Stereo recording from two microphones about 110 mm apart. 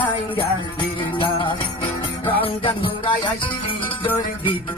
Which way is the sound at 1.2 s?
50° left (ahead or behind).